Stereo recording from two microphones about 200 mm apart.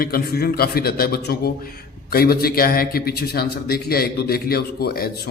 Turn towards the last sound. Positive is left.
turn(degrees=50)  # may be behind; listen again after turning